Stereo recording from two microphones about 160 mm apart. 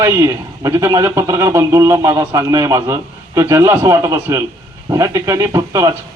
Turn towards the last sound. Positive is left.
turn(degrees=-20)  # may be behind; listen again after turning